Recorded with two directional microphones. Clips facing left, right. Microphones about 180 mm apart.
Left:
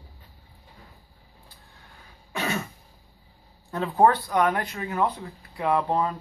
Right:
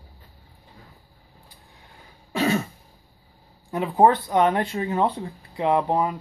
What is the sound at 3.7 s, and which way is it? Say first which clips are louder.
Speech: right 2 dB; 15° right (ahead or behind).